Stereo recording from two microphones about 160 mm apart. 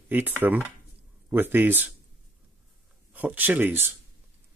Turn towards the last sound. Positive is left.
turn(degrees=-10)  # may be behind; listen again after turning